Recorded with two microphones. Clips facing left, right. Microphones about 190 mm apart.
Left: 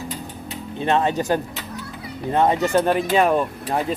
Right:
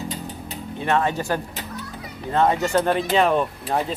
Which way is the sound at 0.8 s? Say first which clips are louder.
Left 2 dB; 20° left (ahead or behind).